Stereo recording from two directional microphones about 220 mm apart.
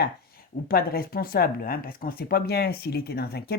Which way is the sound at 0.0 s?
45° left (ahead or behind).